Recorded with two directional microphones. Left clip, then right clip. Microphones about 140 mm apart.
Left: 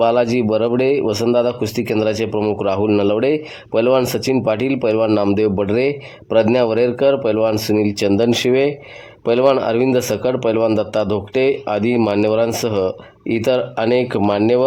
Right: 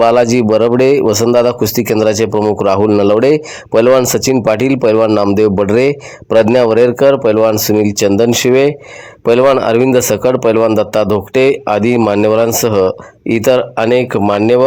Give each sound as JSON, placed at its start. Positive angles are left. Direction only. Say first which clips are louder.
{"t": 0.0, "sound": "speech", "louder": "right 6 dB", "side_deg": -25}